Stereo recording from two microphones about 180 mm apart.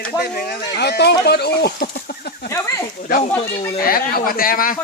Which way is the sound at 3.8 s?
55° left (ahead or behind).